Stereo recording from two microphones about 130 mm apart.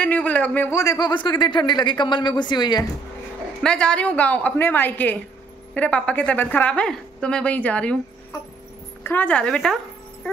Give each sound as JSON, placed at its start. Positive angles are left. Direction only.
{"t": 0.0, "sound": "speech", "side_deg": 10}
{"t": 3.6, "sound": "a woman's voice", "side_deg": 5}
{"t": 9.0, "sound": "a woman's voice", "side_deg": 15}